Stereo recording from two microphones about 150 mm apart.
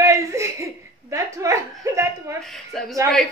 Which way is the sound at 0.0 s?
20° right (ahead or behind).